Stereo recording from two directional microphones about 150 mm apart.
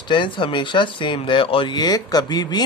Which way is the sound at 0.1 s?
30° left (ahead or behind).